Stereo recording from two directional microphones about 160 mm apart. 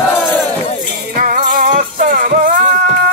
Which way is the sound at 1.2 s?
55° right (ahead or behind).